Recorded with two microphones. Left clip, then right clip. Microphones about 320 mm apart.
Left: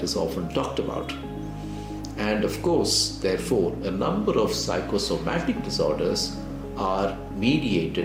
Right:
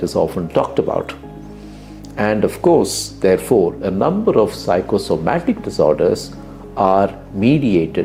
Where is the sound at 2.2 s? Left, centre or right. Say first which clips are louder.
Right 10 dB; right.